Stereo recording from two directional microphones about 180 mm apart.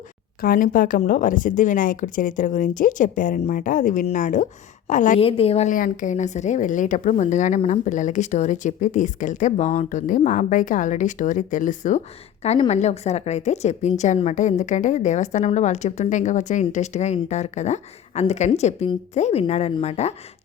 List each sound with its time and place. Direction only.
0.4 s speech: 50° left (ahead or behind)
5.2 s a woman's voice: 35° left (ahead or behind)